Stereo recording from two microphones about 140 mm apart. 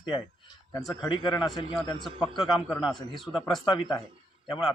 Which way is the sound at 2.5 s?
30° left (ahead or behind).